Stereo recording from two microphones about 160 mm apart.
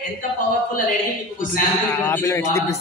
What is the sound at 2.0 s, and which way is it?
Speech, 15° left (ahead or behind).